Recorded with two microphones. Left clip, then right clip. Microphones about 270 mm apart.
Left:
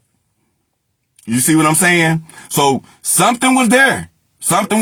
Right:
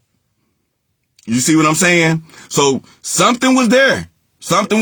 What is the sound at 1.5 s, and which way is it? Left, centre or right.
Speech, left.